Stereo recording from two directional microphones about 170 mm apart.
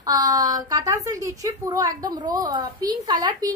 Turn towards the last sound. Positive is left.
turn(degrees=-25)  # may be behind; listen again after turning